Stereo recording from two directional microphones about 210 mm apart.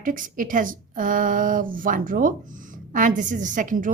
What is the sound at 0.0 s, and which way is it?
A woman's voice, 40° right (ahead or behind).